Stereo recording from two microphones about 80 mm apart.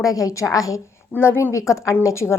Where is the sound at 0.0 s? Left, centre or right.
Left.